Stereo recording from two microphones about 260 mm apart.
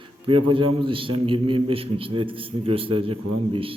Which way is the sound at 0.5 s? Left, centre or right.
Centre.